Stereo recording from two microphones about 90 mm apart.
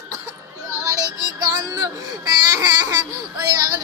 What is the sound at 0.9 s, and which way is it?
Baby cry, 40° right (ahead or behind).